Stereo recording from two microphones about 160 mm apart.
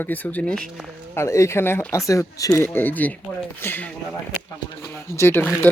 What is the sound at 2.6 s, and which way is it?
Speech, 10° left (ahead or behind).